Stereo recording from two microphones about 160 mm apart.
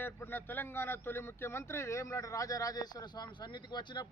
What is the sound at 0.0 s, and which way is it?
Speech, 15° left (ahead or behind).